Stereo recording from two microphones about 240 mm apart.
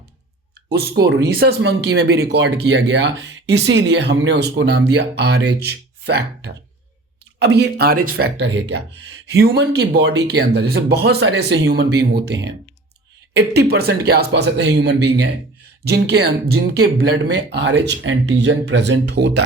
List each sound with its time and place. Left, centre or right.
0.7 s speech: right